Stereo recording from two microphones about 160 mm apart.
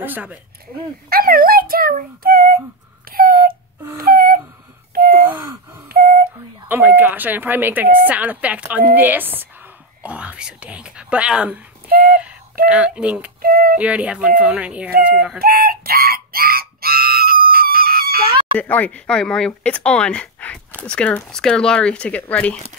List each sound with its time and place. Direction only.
0.0 s speech: 10° right (ahead or behind)
1.1 s speech: 65° right (ahead or behind)
3.1 s a sound: 65° right (ahead or behind)
4.9 s gasp: 70° right (ahead or behind)
5.9 s a sound: 70° right (ahead or behind)
6.7 s speech: 10° right (ahead or behind)
11.9 s a sound: 60° right (ahead or behind)
12.6 s speech: 5° right (ahead or behind)
13.4 s speech: 65° right (ahead or behind)
13.7 s speech: 10° right (ahead or behind)
15.3 s chicken: 65° right (ahead or behind)
18.6 s speech: 10° left (ahead or behind)